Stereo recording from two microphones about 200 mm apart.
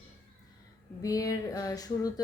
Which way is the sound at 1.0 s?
15° left (ahead or behind).